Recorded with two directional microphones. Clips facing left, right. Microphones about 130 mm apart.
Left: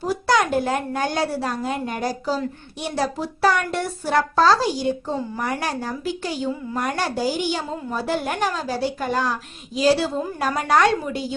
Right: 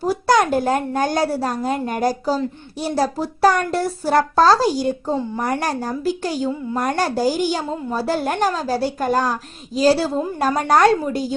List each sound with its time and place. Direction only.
0.1 s a woman's voice: 45° right (ahead or behind)